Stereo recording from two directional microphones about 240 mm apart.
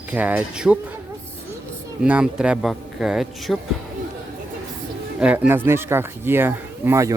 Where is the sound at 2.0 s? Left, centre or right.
Centre.